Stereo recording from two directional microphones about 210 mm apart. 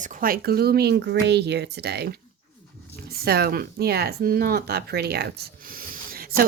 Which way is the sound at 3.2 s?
45° right (ahead or behind).